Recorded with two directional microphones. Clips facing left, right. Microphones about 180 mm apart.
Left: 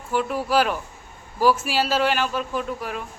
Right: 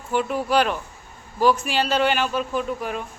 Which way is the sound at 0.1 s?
Centre (ahead or behind).